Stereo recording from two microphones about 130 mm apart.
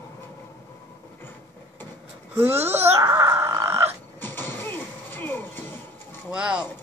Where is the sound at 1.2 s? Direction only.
15° left (ahead or behind).